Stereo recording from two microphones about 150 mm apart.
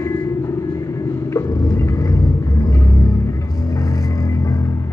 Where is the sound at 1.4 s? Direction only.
20° left (ahead or behind).